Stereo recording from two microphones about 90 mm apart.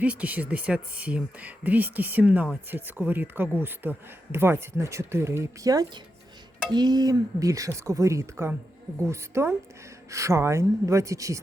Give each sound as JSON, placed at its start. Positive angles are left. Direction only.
{"t": 0.0, "sound": "speech", "side_deg": -15}
{"t": 6.7, "sound": "speech", "side_deg": -50}